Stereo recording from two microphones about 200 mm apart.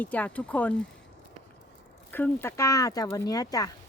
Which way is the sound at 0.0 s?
10° left (ahead or behind).